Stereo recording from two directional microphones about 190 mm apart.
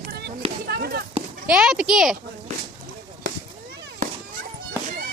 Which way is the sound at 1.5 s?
5° right (ahead or behind).